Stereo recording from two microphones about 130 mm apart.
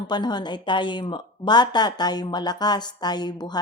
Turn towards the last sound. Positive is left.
turn(degrees=30)  # may be behind; listen again after turning